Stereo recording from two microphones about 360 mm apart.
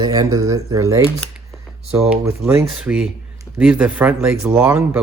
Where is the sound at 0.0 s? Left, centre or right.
Centre.